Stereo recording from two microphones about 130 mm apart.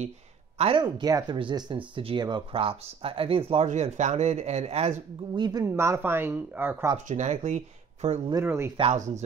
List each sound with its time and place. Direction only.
0.6 s speech: 40° right (ahead or behind)
3.6 s speech: 65° right (ahead or behind)
5.3 s speech: 30° right (ahead or behind)
5.7 s speech: 20° right (ahead or behind)
7.1 s speech: 65° right (ahead or behind)
8.5 s speech: 20° right (ahead or behind)
8.9 s speech: 70° right (ahead or behind)